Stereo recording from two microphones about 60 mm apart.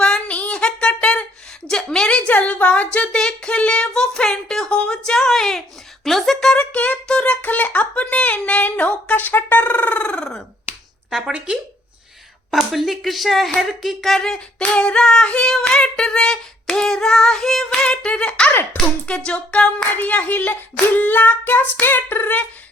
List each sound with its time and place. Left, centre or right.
0.0 s a sound: centre
1.6 s speech: centre
3.2 s female singing: centre
6.1 s speech: centre
6.7 s speech: left
11.3 s speech: centre
12.5 s speech: centre
14.2 s female singing: centre
18.7 s speech: centre